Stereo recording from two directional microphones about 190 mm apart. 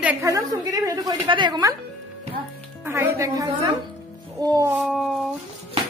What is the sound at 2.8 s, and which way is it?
A woman's voice, 15° right (ahead or behind).